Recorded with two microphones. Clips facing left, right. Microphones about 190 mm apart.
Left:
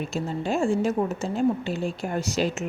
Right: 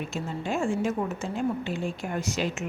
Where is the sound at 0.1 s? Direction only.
35° left (ahead or behind).